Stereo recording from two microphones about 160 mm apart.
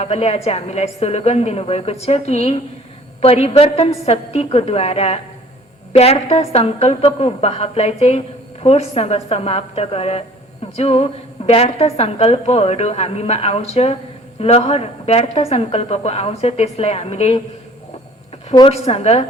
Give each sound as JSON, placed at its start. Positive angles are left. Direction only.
{"t": 0.0, "sound": "a woman's voice", "side_deg": 40}
{"t": 18.5, "sound": "a woman's voice", "side_deg": 35}